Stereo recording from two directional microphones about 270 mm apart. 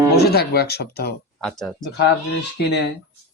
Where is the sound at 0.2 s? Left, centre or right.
Left.